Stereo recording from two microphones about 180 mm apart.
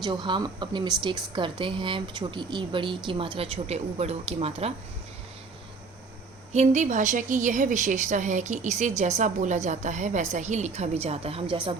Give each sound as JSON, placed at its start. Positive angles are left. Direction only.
{"t": 0.0, "sound": "speech", "side_deg": -25}
{"t": 6.5, "sound": "a woman's voice", "side_deg": -40}